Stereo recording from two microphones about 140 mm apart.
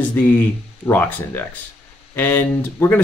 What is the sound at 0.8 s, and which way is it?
Speech, 15° left (ahead or behind).